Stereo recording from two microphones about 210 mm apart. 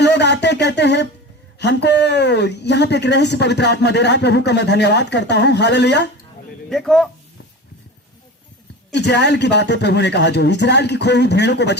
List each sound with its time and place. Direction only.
0.0 s a sound: 55° left (ahead or behind)
1.5 s speech: 55° left (ahead or behind)
6.7 s speech: centre (ahead or behind)
8.9 s a man's voice: 55° left (ahead or behind)